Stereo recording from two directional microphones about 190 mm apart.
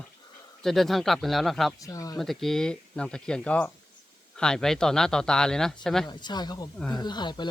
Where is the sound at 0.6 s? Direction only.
Centre (ahead or behind).